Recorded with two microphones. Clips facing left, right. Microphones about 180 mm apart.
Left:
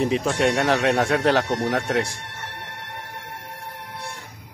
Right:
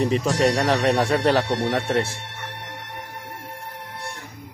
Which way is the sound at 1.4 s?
30° right (ahead or behind).